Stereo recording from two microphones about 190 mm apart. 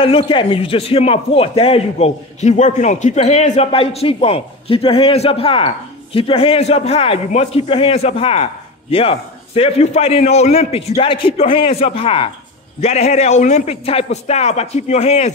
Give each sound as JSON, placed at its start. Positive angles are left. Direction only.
{"t": 0.0, "sound": "a man's voice", "side_deg": 30}